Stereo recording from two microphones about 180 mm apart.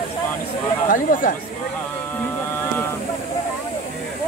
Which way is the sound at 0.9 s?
50° left (ahead or behind).